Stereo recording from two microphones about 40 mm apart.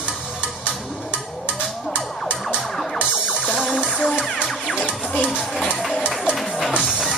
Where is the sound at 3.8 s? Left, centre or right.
Centre.